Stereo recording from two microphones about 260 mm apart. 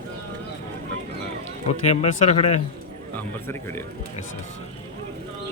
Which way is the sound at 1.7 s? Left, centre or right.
Left.